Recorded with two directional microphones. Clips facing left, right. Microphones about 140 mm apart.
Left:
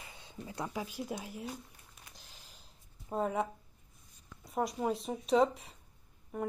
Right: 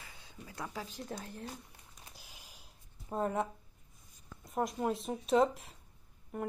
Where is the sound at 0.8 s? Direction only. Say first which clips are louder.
Left 3 dB; 10° left (ahead or behind).